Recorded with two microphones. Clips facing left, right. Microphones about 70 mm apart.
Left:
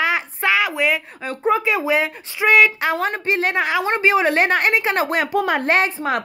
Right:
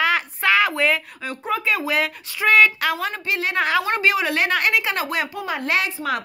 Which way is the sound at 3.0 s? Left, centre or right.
Left.